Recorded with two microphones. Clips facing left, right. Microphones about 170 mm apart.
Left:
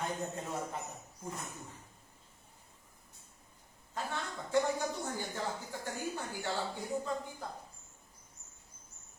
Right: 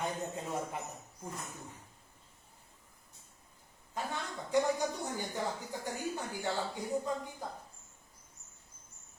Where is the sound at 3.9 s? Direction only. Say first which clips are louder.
Even; 15° right (ahead or behind).